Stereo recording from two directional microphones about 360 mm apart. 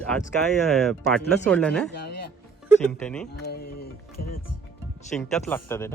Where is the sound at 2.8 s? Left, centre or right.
Centre.